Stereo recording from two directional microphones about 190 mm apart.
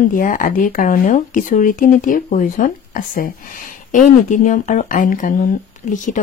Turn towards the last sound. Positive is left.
turn(degrees=40)  # may be behind; listen again after turning